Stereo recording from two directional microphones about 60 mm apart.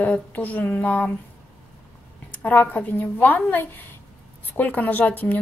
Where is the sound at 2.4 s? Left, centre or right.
Left.